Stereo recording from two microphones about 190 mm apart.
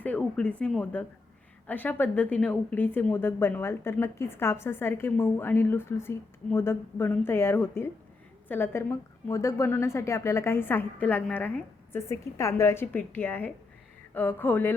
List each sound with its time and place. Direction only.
0.0 s speech: 5° left (ahead or behind)